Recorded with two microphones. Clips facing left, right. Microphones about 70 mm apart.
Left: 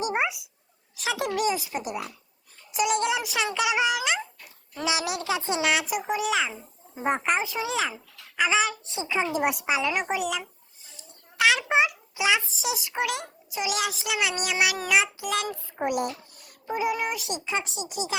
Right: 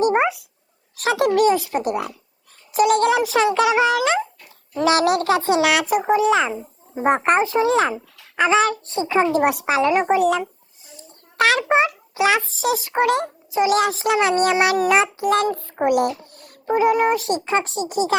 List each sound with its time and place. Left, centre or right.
0.0 s dog: right
0.9 s a child's voice: right
3.2 s a child's voice: right
4.9 s speech: right
5.8 s a child's voice: right
6.9 s a child's voice: right
8.8 s a child's voice: centre
9.0 s a child's voice: right
9.8 s a child's voice: right
12.2 s a child's voice: right
15.6 s a child's voice: right